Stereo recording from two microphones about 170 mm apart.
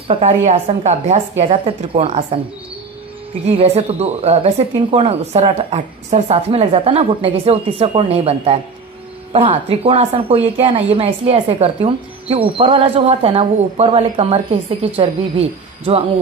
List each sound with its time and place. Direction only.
0.1 s speech: 40° right (ahead or behind)
3.4 s speech: 35° right (ahead or behind)